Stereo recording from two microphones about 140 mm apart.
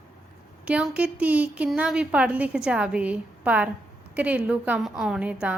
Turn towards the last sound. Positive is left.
turn(degrees=-10)  # may be behind; listen again after turning